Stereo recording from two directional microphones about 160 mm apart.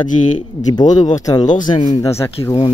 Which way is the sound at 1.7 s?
35° left (ahead or behind).